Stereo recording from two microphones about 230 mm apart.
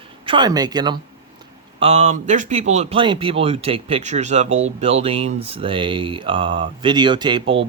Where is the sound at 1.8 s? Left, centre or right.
Right.